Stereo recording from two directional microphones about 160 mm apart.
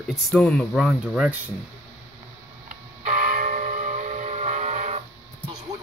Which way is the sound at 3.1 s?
50° right (ahead or behind).